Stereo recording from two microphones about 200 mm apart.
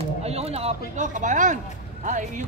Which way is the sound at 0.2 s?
30° right (ahead or behind).